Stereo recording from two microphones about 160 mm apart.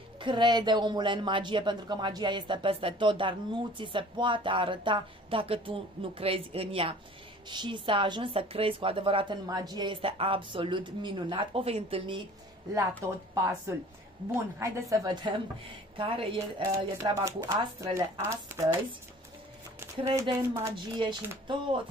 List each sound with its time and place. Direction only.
0.2 s a woman's voice: 30° right (ahead or behind)
12.7 s a woman's voice: 20° right (ahead or behind)
16.6 s speech: 20° right (ahead or behind)
20.2 s speech: 15° right (ahead or behind)
20.7 s speech: 30° right (ahead or behind)